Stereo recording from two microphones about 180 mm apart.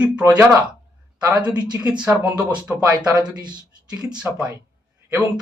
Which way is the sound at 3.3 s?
25° right (ahead or behind).